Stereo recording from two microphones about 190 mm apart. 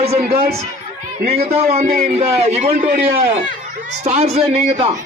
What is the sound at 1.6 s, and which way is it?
A man's voice, 35° right (ahead or behind).